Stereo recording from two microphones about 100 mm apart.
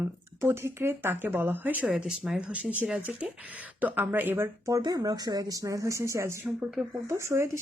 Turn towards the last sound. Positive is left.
turn(degrees=-30)  # may be behind; listen again after turning